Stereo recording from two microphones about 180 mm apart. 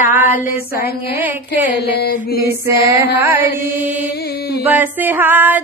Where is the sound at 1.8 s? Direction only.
60° left (ahead or behind).